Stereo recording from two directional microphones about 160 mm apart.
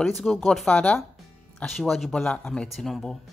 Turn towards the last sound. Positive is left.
turn(degrees=0)  # may be behind; listen again after turning